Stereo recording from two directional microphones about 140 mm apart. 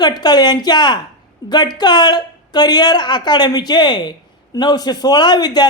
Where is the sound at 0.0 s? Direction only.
30° left (ahead or behind).